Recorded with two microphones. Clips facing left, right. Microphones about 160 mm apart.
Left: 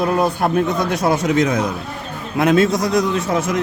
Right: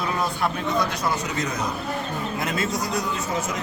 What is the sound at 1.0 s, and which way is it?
A man's voice, 85° left.